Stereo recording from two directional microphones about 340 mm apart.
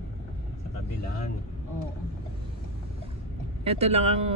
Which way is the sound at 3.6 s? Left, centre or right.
Centre.